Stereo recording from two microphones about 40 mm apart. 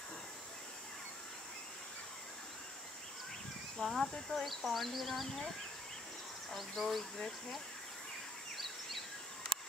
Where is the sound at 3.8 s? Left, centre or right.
Centre.